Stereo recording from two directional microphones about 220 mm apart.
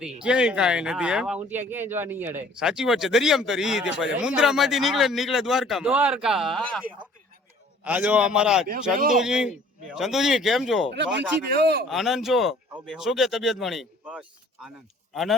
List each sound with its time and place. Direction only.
0.2 s speech: 5° right (ahead or behind)
7.9 s speech: 5° right (ahead or behind)
10.9 s speech: 50° right (ahead or behind)
11.9 s speech: centre (ahead or behind)